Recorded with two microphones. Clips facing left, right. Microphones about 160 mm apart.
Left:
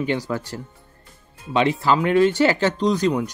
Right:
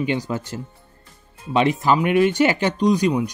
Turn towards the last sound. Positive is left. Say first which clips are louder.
# right 2 dB
turn(degrees=-15)  # may be behind; listen again after turning